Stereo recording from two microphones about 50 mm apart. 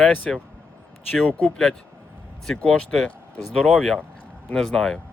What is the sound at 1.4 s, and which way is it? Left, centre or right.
Speech, centre.